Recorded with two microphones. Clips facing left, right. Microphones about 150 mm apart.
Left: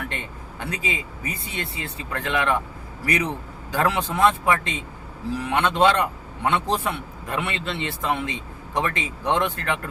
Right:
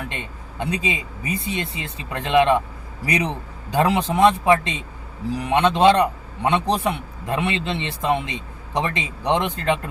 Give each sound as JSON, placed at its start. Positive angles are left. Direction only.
{"t": 0.1, "sound": "speech", "side_deg": -20}
{"t": 3.7, "sound": "a man's voice", "side_deg": -20}